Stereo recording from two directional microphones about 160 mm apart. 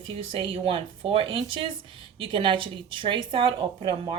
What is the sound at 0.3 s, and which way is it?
Speech, 35° right (ahead or behind).